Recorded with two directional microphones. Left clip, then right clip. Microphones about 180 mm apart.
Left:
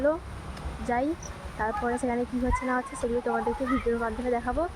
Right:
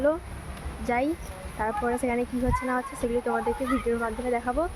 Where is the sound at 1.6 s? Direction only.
10° right (ahead or behind).